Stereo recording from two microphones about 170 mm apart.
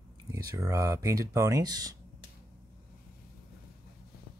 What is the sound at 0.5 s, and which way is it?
Speech, 20° right (ahead or behind).